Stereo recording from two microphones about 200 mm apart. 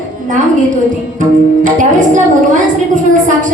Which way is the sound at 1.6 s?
40° right (ahead or behind).